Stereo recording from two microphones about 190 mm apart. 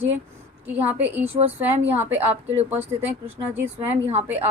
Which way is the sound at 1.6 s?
10° right (ahead or behind).